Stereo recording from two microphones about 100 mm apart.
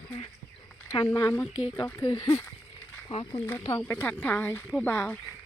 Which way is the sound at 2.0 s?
50° left (ahead or behind).